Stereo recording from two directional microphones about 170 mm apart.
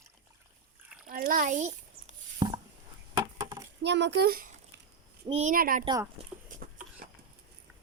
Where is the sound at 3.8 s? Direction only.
90° right; by 4.8 s 65° right (ahead or behind).